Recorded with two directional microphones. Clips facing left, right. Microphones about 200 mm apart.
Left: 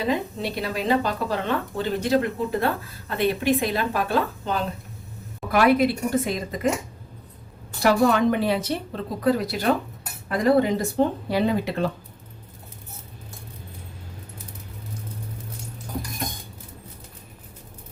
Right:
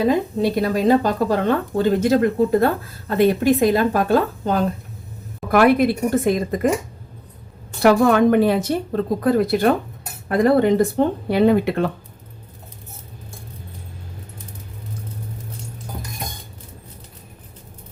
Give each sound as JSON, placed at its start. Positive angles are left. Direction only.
{"t": 0.4, "sound": "speech", "side_deg": -45}
{"t": 7.8, "sound": "speech", "side_deg": -55}